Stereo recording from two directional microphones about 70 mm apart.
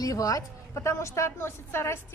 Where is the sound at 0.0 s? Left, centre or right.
Left.